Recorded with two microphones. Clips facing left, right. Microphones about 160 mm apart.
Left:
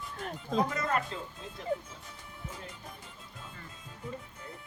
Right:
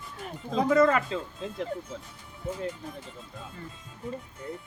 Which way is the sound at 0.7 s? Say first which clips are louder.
Right 11 dB; 90° right.